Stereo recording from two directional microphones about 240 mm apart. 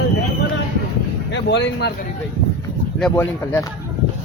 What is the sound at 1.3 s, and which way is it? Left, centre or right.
Speech, left.